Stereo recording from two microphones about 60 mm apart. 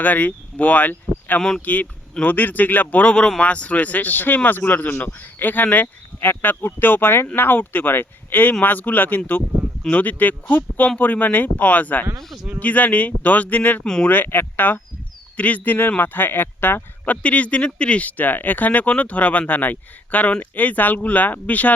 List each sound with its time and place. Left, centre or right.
0.0 s speech: left
1.4 s speech: centre
1.6 s speech: left
13.8 s speech: centre
14.1 s speech: left
17.2 s speech: left